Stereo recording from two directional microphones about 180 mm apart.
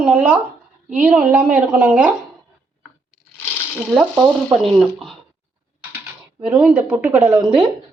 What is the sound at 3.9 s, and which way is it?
A woman's voice, 10° right (ahead or behind).